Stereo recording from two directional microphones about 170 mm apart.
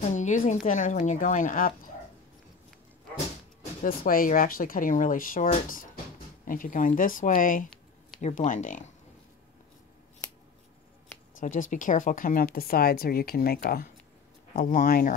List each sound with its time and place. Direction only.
0.1 s speech: 45° left (ahead or behind)
3.8 s speech: 55° left (ahead or behind)
11.3 s speech: 50° left (ahead or behind)